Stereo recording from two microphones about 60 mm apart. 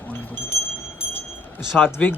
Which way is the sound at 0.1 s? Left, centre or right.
Left.